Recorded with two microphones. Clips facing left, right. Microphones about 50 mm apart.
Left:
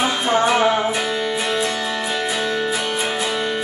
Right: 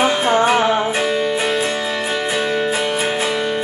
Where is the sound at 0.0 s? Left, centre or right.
Right.